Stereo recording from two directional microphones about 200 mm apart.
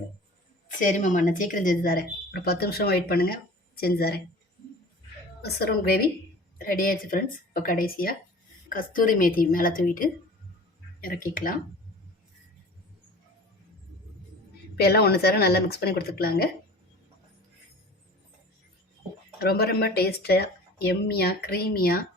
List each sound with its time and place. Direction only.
0.8 s speech: 40° left (ahead or behind)
5.4 s speech: 50° left (ahead or behind)
14.8 s speech: 50° left (ahead or behind)
19.4 s speech: 50° left (ahead or behind)